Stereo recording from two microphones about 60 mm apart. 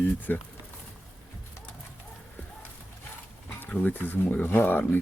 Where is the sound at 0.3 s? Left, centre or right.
Left.